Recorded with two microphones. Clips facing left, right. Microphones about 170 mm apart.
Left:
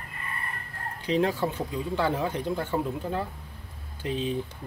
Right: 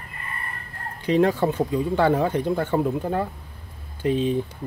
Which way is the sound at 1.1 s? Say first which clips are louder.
Right 6 dB; 55° right (ahead or behind).